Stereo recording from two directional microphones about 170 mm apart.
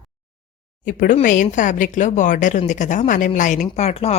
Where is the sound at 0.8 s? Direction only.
50° left (ahead or behind).